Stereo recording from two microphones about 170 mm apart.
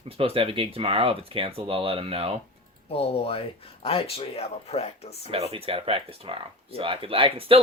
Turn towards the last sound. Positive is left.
turn(degrees=-35)  # may be behind; listen again after turning